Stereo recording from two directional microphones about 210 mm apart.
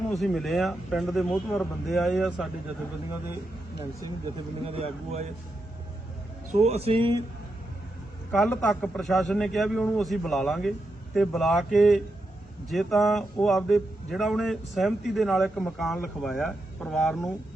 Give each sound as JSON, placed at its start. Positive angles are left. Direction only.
{"t": 0.2, "sound": "speech", "side_deg": 0}
{"t": 4.6, "sound": "a man's voice", "side_deg": -25}
{"t": 6.6, "sound": "a man's voice", "side_deg": -30}
{"t": 8.3, "sound": "speech", "side_deg": 5}